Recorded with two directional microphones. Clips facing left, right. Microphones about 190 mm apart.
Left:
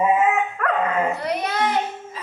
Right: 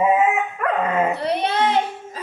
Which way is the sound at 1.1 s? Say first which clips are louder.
Right 3 dB; 30° right (ahead or behind).